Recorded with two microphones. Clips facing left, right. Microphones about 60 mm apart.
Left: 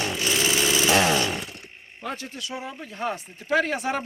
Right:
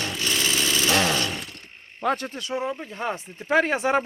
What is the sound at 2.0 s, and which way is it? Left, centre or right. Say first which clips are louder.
Speech: right 9 dB; right.